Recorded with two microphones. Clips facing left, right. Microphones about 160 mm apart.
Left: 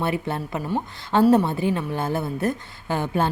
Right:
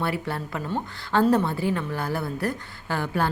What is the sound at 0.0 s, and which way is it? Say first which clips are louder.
Speech: left 3 dB; 20° left (ahead or behind).